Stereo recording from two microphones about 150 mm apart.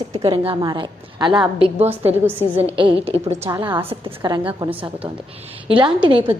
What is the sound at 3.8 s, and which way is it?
A woman's voice, 35° right (ahead or behind).